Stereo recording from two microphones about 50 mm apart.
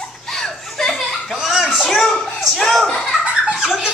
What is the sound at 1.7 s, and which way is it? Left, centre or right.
A child's voice, centre.